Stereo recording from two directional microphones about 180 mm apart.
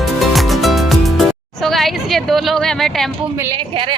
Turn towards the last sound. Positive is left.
turn(degrees=0)  # may be behind; listen again after turning